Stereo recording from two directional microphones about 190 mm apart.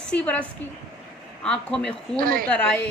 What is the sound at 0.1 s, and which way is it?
Speech, 5° left (ahead or behind).